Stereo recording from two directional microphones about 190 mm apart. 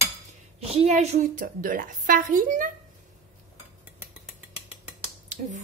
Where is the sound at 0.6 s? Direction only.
30° right (ahead or behind).